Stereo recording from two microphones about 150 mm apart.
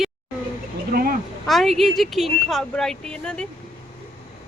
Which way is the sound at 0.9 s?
80° right.